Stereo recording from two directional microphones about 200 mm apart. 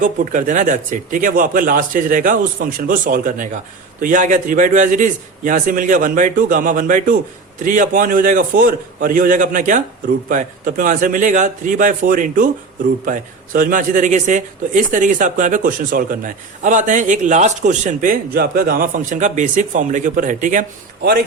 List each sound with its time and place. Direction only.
0.0 s speech: 40° right (ahead or behind)